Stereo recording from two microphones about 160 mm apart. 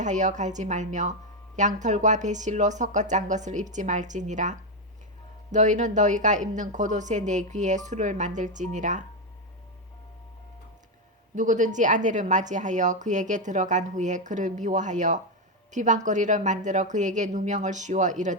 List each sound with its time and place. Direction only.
0.0 s a woman's voice: 50° right (ahead or behind)
11.3 s a woman's voice: 50° right (ahead or behind)